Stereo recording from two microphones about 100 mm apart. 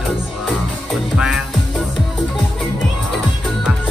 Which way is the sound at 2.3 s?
5° left (ahead or behind).